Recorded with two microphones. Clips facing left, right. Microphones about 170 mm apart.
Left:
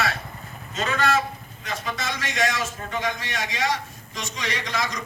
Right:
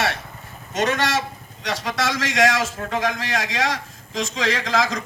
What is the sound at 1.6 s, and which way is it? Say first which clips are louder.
A man's voice: right 6 dB; 90° right.